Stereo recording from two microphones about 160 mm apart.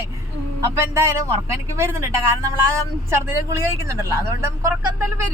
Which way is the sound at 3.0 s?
20° right (ahead or behind).